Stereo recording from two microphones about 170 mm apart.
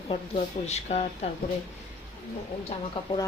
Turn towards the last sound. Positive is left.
turn(degrees=30)  # may be behind; listen again after turning